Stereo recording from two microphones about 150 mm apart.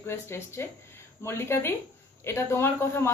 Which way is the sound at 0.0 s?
15° left (ahead or behind).